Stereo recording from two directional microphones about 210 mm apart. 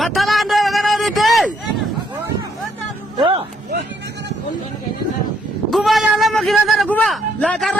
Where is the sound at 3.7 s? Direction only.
55° right (ahead or behind).